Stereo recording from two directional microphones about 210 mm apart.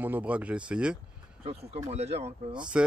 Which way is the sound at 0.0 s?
10° right (ahead or behind).